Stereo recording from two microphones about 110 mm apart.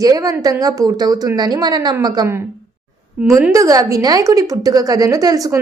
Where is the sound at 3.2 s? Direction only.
10° right (ahead or behind).